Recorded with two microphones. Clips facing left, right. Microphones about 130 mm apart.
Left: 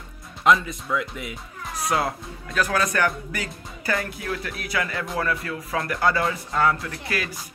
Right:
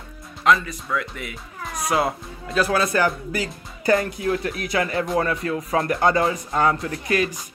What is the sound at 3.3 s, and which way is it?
Speech, 35° right (ahead or behind).